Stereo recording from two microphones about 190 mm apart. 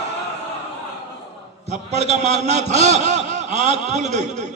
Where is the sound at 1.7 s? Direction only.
35° right (ahead or behind).